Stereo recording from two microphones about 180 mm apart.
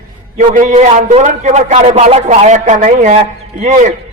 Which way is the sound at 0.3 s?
40° right (ahead or behind).